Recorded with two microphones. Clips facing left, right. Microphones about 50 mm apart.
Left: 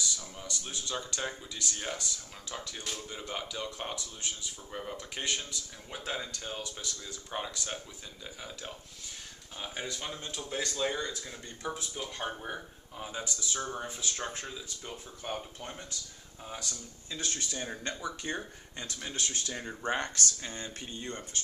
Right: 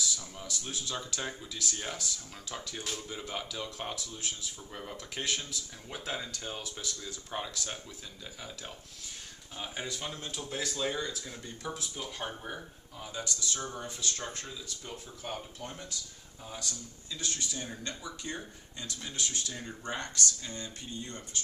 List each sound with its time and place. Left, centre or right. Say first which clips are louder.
0.0 s speech: even; centre
12.9 s speech: left 1 dB; left
17.1 s speech: left 1 dB; left